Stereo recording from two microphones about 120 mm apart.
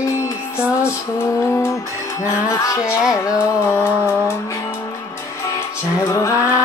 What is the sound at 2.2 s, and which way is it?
Music, 30° left (ahead or behind).